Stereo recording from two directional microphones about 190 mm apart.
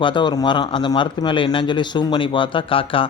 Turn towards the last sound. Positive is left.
turn(degrees=30)  # may be behind; listen again after turning